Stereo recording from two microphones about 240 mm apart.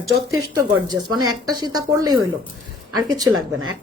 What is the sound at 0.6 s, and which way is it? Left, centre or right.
Speech, centre.